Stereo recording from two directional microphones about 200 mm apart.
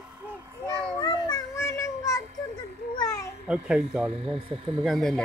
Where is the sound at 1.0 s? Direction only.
20° left (ahead or behind).